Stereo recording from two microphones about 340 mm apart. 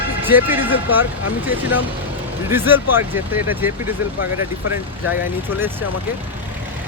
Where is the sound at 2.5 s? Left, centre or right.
Centre.